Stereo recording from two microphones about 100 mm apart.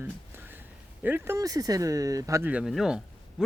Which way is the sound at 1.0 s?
20° right (ahead or behind).